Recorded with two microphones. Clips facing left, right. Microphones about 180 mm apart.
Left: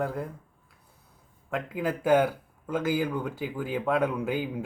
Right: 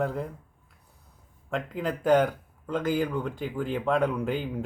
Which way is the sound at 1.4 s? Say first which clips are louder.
Even; 5° left (ahead or behind).